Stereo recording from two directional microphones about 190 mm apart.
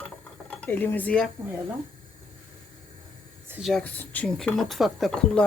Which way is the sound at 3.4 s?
10° right (ahead or behind).